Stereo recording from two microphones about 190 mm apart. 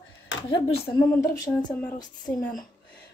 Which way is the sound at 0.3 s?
90° left.